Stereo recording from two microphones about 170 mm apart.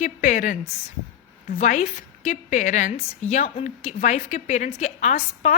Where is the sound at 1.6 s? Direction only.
45° left (ahead or behind).